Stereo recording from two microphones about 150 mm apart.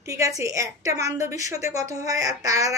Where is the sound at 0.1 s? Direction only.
20° right (ahead or behind).